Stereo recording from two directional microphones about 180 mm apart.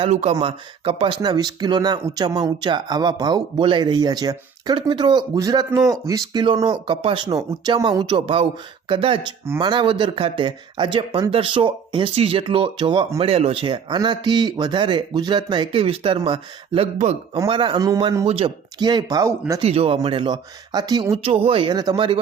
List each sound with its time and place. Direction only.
0.0 s speech: 40° right (ahead or behind)
17.3 s speech: 25° right (ahead or behind)
18.3 s speech: 30° right (ahead or behind)
19.6 s speech: 30° right (ahead or behind)